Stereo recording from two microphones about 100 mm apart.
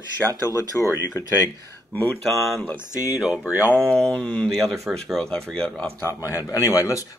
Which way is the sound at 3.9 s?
5° left (ahead or behind).